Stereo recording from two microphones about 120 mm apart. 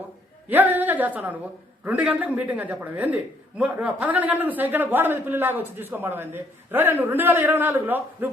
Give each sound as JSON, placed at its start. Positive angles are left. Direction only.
{"t": 0.4, "sound": "a woman's voice", "side_deg": -15}